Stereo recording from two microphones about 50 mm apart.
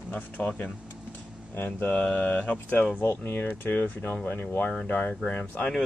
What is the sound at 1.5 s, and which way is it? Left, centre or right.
Speech, left.